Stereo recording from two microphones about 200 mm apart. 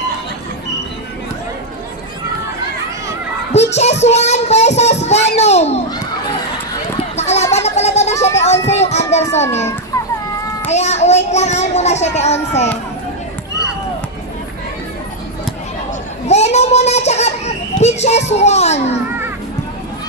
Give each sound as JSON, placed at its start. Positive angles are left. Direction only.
{"t": 3.5, "sound": "child singing", "side_deg": 35}
{"t": 4.0, "sound": "a child's voice", "side_deg": 35}
{"t": 7.2, "sound": "a sound", "side_deg": 35}
{"t": 8.4, "sound": "children playing", "side_deg": 35}
{"t": 10.7, "sound": "a child's voice", "side_deg": 35}
{"t": 16.3, "sound": "a child's voice", "side_deg": 35}